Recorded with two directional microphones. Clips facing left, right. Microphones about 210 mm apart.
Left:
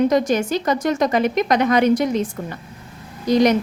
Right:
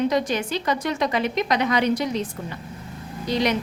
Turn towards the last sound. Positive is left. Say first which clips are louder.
# left 7 dB
turn(degrees=45)  # may be behind; listen again after turning